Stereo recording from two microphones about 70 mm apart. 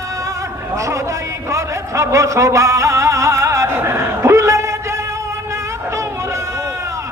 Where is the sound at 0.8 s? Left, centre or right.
Right.